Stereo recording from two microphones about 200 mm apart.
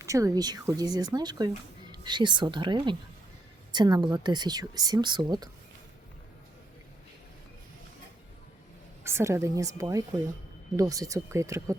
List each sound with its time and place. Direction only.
0.0 s speech: 15° right (ahead or behind)
9.0 s speech: 15° right (ahead or behind)